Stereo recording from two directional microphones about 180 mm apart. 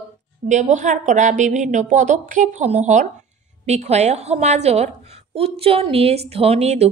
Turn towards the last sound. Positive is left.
turn(degrees=-35)  # may be behind; listen again after turning